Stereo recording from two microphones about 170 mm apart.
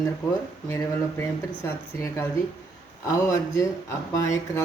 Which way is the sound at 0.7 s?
15° left (ahead or behind).